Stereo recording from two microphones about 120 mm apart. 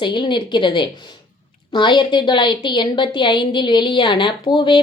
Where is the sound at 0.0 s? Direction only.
40° left (ahead or behind).